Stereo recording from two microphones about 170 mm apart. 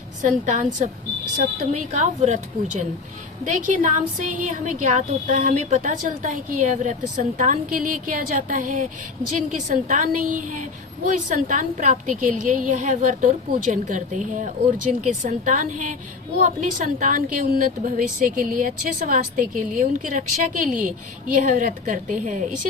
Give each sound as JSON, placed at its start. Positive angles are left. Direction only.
{"t": 0.2, "sound": "a woman's voice", "side_deg": -45}